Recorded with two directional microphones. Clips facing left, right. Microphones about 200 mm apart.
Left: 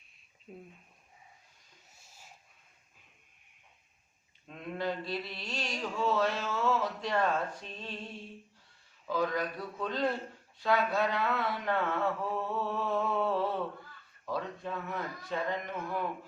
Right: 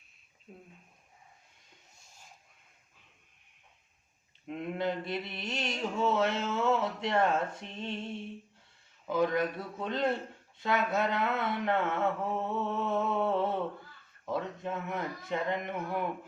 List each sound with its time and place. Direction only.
0.5 s speech: 5° left (ahead or behind)
4.4 s mantra: 20° right (ahead or behind)